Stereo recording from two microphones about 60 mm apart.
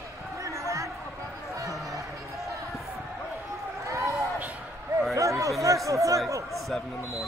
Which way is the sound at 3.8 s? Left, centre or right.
Right.